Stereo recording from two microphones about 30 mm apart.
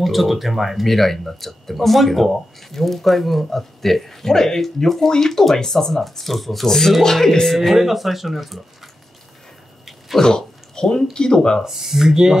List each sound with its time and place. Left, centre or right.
0.0 s speech: centre
7.5 s speech: centre
10.2 s speech: left
11.6 s speech: centre